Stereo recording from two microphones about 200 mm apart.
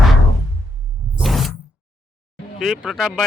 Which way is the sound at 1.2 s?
Centre (ahead or behind).